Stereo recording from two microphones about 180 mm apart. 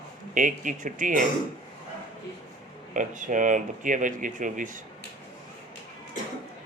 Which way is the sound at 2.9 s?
45° right (ahead or behind).